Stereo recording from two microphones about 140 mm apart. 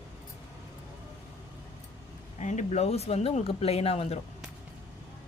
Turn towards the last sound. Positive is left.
turn(degrees=45)  # may be behind; listen again after turning